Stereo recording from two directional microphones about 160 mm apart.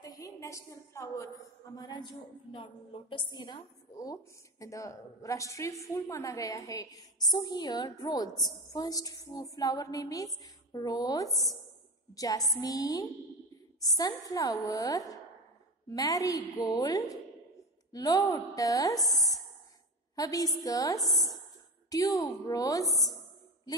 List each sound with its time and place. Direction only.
0.2 s a woman's voice: 20° left (ahead or behind)
18.9 s speech: centre (ahead or behind)
20.2 s a woman's voice: 20° left (ahead or behind)